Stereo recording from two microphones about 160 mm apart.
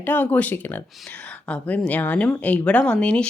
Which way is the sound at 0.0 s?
10° left (ahead or behind).